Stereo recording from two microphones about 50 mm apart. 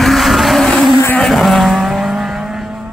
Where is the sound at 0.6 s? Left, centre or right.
Centre.